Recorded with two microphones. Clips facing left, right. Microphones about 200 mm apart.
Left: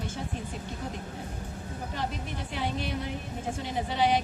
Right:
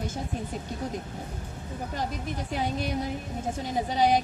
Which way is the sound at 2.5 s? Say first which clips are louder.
Right 3 dB; 40° right (ahead or behind).